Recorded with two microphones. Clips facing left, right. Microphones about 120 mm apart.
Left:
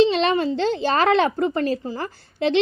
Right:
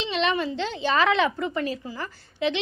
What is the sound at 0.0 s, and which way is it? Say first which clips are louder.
A child's voice: left 8 dB; 40° left (ahead or behind).